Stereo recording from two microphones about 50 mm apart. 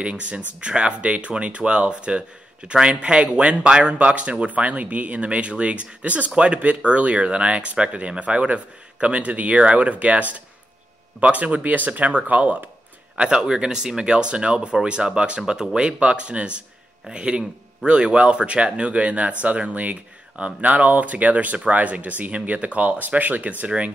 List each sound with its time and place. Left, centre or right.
0.0 s speech: right
13.2 s speech: centre; by 23.5 s right